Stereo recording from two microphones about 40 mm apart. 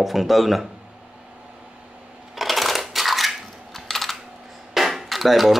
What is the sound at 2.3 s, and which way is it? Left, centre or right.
Coin, centre.